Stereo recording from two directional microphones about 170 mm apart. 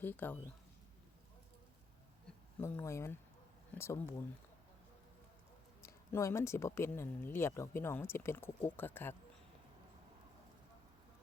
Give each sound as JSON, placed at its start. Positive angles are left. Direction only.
{"t": 0.0, "sound": "speech", "side_deg": 10}
{"t": 2.6, "sound": "speech", "side_deg": 15}
{"t": 5.8, "sound": "speech", "side_deg": 15}